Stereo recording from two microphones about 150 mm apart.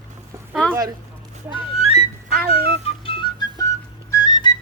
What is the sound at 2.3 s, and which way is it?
Speech, 90° right.